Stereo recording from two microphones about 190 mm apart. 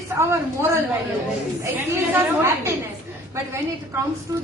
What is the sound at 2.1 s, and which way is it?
Speech, 10° right (ahead or behind).